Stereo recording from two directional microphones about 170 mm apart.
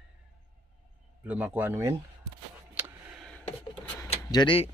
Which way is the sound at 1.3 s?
10° right (ahead or behind).